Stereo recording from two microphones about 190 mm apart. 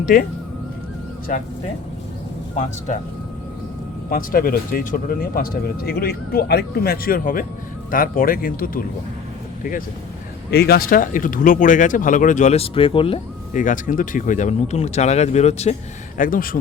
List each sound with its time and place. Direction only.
0.0 s speech: 50° left (ahead or behind)
1.3 s speech: 45° left (ahead or behind)
2.6 s speech: 40° left (ahead or behind)
4.1 s speech: 50° left (ahead or behind)
10.5 s speech: 55° left (ahead or behind); by 13.1 s 30° left (ahead or behind)
13.5 s speech: 45° left (ahead or behind)
16.1 s speech: 45° left (ahead or behind)